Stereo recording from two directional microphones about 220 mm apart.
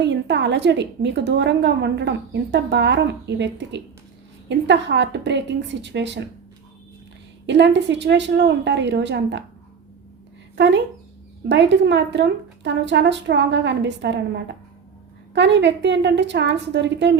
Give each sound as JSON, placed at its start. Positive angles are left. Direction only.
{"t": 0.0, "sound": "a woman's voice", "side_deg": -55}
{"t": 7.4, "sound": "a woman's voice", "side_deg": -55}
{"t": 11.4, "sound": "a woman's voice", "side_deg": -50}